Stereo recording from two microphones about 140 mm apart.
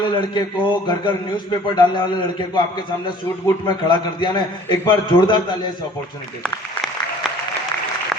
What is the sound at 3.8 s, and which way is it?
A man's voice, 30° left (ahead or behind).